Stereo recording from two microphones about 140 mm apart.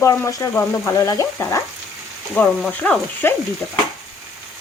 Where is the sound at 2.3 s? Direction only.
10° left (ahead or behind).